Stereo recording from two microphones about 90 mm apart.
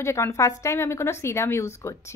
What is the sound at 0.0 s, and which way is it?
A woman's voice, 30° left (ahead or behind).